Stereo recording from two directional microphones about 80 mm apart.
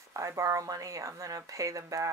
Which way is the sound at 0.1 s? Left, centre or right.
Right.